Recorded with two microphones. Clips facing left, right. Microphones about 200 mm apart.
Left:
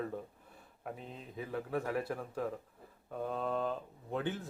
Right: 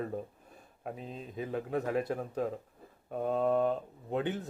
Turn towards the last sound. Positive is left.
turn(degrees=-20)  # may be behind; listen again after turning